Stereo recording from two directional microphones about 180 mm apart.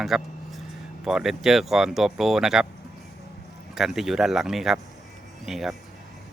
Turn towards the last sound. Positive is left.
turn(degrees=0)  # may be behind; listen again after turning